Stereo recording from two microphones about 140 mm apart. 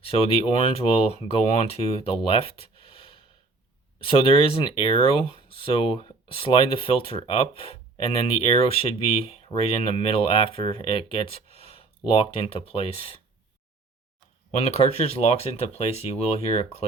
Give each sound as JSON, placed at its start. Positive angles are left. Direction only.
{"t": 0.0, "sound": "speech", "side_deg": 45}
{"t": 14.6, "sound": "speech", "side_deg": 50}